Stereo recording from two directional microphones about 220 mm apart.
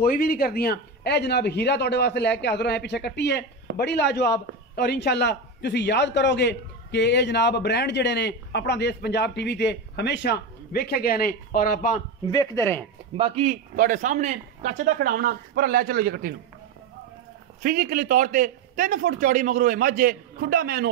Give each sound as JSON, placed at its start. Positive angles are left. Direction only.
{"t": 0.0, "sound": "a man's voice", "side_deg": 40}
{"t": 12.3, "sound": "speech", "side_deg": 15}
{"t": 13.2, "sound": "a man's voice", "side_deg": -30}
{"t": 17.6, "sound": "a man's voice", "side_deg": -40}